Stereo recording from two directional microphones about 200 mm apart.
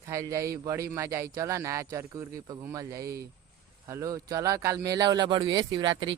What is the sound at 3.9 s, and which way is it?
Speech, 15° right (ahead or behind).